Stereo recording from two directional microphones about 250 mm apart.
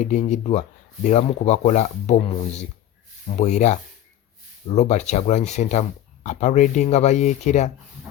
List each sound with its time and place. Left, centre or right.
0.0 s speech: left